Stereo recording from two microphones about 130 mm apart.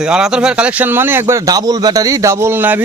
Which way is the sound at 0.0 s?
5° right (ahead or behind).